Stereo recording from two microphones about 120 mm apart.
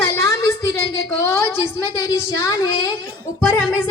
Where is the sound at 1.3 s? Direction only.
25° left (ahead or behind).